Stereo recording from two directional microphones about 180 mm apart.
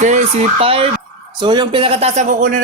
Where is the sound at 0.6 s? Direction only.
30° right (ahead or behind).